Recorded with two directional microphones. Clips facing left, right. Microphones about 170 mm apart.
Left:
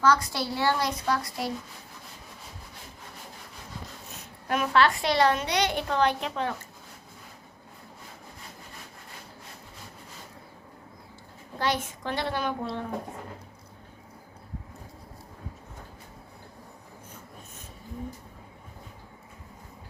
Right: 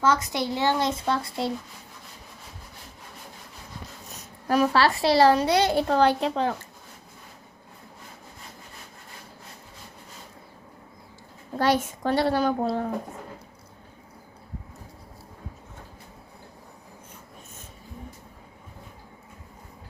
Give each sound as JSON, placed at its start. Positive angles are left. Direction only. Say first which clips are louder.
{"t": 0.0, "sound": "speech", "louder": "right 1 dB", "side_deg": -20}
{"t": 4.2, "sound": "a child's voice", "louder": "right 7 dB", "side_deg": -35}
{"t": 11.6, "sound": "a child's voice", "louder": "right 6 dB", "side_deg": -45}